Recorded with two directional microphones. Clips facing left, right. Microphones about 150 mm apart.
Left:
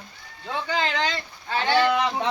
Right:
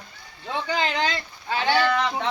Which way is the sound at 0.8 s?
15° right (ahead or behind).